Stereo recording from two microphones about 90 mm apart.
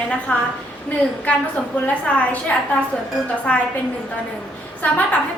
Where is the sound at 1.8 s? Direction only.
15° left (ahead or behind).